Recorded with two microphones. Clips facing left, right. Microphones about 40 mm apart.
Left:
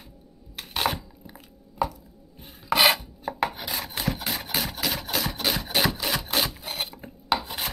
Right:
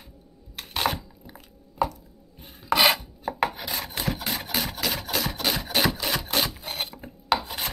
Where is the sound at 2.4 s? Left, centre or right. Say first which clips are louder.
Even; centre.